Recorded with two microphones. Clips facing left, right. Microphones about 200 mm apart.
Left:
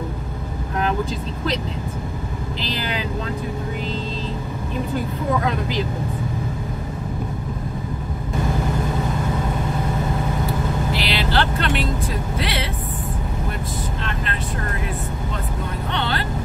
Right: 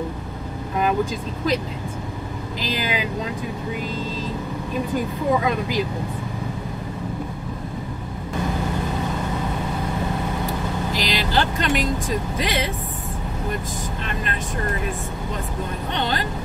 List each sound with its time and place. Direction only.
2.7 s speech: 10° right (ahead or behind)
5.4 s speech: 10° right (ahead or behind)
10.9 s vehicle: 45° right (ahead or behind)
11.2 s speech: 15° right (ahead or behind)
15.9 s speech: 15° right (ahead or behind)